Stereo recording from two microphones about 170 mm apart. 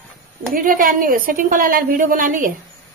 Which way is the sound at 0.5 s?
55° right (ahead or behind).